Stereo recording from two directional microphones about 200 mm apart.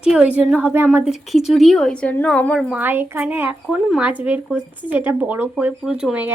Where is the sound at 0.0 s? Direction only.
5° right (ahead or behind).